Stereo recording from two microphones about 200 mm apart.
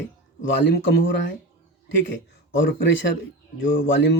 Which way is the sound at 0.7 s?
60° left (ahead or behind).